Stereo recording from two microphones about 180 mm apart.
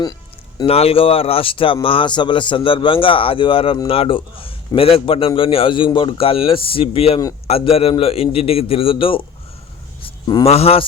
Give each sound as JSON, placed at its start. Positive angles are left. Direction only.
{"t": 0.6, "sound": "a man's voice", "side_deg": 35}
{"t": 10.0, "sound": "a sound", "side_deg": 25}
{"t": 10.5, "sound": "a man's voice", "side_deg": 35}